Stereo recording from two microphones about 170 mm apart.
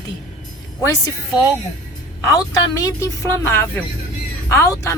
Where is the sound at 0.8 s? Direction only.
20° left (ahead or behind).